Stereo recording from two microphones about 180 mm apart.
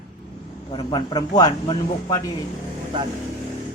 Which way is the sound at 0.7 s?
25° left (ahead or behind).